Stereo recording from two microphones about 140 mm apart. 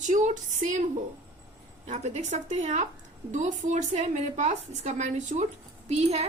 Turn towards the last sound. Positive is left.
turn(degrees=-50)  # may be behind; listen again after turning